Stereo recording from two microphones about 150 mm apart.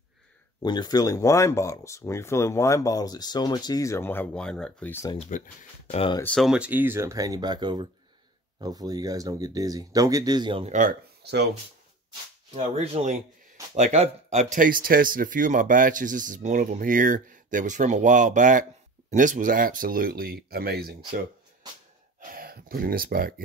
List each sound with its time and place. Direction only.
0.6 s speech: 25° left (ahead or behind); by 5.0 s 10° left (ahead or behind)
5.3 s speech: 60° left (ahead or behind)
6.2 s speech: 5° left (ahead or behind)
6.5 s speech: 10° right (ahead or behind); by 10.6 s 30° right (ahead or behind)
10.6 s speech: 60° right (ahead or behind); by 11.4 s 80° right
12.5 s speech: 45° right (ahead or behind); by 20.9 s 90° right
22.3 s speech: 75° right (ahead or behind)